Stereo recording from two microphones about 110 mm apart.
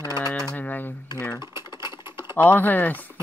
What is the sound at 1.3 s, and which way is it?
Typing, 40° left (ahead or behind).